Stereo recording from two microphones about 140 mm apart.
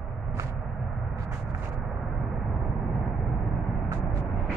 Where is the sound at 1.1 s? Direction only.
20° right (ahead or behind).